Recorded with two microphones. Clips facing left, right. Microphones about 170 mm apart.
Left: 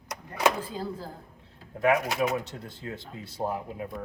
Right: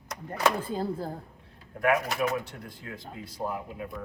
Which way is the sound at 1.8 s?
20° left (ahead or behind).